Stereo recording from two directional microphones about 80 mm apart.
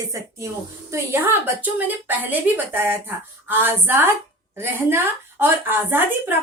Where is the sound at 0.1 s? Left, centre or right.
Right.